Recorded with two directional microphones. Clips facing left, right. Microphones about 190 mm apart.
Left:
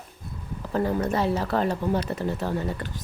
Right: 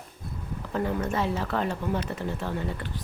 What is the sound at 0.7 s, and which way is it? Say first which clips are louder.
Speech: left 3 dB; 35° left (ahead or behind).